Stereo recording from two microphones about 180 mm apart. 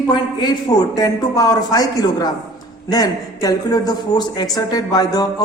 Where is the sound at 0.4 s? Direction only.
20° left (ahead or behind).